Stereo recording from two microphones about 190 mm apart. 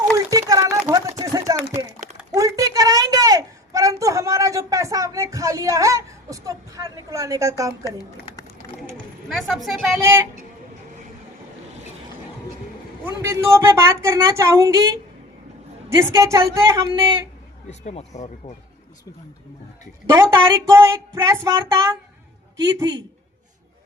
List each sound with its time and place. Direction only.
0.3 s a sound: 20° right (ahead or behind)
9.5 s speech: centre (ahead or behind)
10.0 s speech: 15° right (ahead or behind)
13.2 s speech: 15° right (ahead or behind)
16.0 s speech: 15° right (ahead or behind)
17.7 s speech: 35° left (ahead or behind)
20.3 s a man's voice: 15° right (ahead or behind)